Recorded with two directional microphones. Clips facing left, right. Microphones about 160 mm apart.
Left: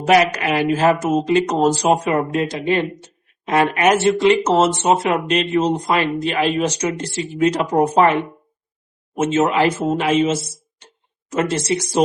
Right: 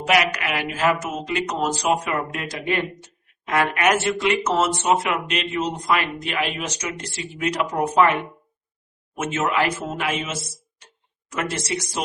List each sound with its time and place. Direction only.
0.0 s speech: 35° left (ahead or behind)
9.1 s speech: 25° left (ahead or behind)